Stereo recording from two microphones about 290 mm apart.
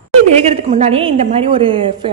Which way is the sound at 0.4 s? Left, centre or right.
Right.